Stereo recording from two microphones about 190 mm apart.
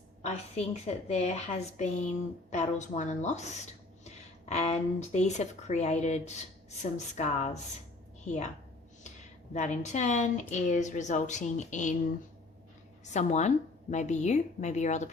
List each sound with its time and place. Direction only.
0.2 s a woman's voice: 35° left (ahead or behind)
13.1 s a woman's voice: 40° left (ahead or behind)